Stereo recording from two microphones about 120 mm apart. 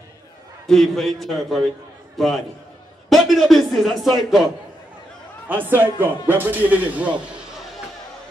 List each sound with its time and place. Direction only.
0.7 s a man's voice: centre (ahead or behind)
5.5 s speech: 15° right (ahead or behind)